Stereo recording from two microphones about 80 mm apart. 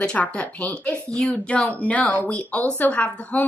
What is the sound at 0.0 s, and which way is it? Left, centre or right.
A woman's voice, centre.